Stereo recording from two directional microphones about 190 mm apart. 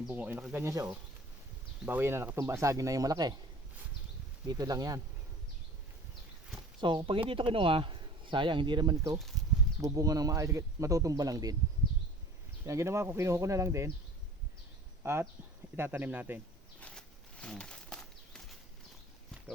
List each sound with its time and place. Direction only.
0.0 s speech: 10° right (ahead or behind)
4.4 s speech: 20° right (ahead or behind)
6.7 s speech: 25° right (ahead or behind)
12.6 s speech: 15° right (ahead or behind)
15.0 s speech: 15° right (ahead or behind)
16.8 s a sound: 5° left (ahead or behind)